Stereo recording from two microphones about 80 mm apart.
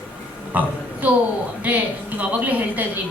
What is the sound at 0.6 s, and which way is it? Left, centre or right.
Speech, centre.